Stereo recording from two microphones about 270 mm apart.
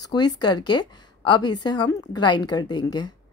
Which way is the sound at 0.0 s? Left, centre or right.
Centre.